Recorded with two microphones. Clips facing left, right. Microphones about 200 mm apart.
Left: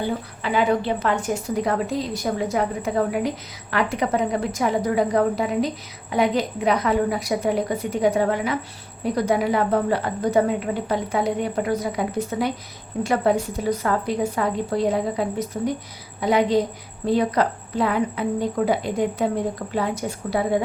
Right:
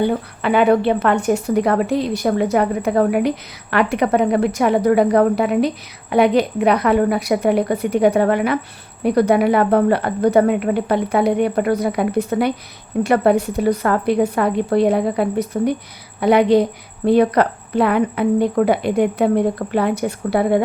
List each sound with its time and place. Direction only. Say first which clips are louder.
0.0 s a woman's voice: right 7 dB; 65° right (ahead or behind)